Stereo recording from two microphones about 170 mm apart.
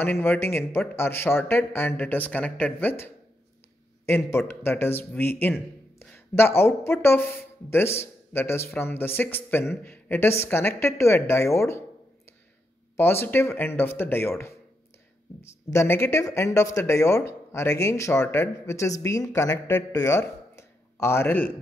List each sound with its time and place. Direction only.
0.0 s speech: 15° left (ahead or behind)
12.9 s speech: 15° left (ahead or behind)
15.7 s speech: 15° left (ahead or behind)